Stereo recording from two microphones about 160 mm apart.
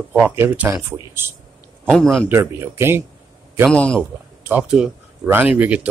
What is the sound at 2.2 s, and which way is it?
Speech, 15° right (ahead or behind).